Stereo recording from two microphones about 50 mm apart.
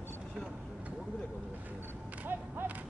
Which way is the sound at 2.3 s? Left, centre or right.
Right.